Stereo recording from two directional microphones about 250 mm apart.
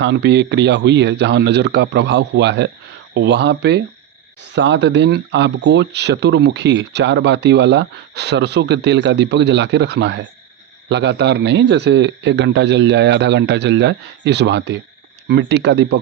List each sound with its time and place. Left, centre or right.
0.0 s speech: right